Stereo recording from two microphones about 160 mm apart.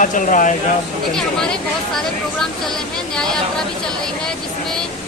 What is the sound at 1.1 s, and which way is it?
Speech, 5° left (ahead or behind).